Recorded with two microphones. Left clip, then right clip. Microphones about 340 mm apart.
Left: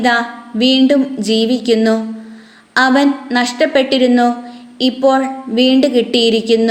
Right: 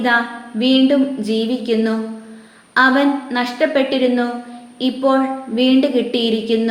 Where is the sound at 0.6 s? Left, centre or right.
Left.